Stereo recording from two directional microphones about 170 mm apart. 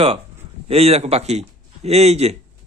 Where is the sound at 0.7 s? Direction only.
35° right (ahead or behind).